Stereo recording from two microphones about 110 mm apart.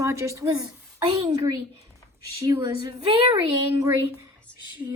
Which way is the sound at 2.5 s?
45° right (ahead or behind).